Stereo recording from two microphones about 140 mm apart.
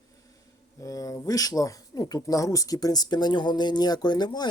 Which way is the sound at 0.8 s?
25° left (ahead or behind).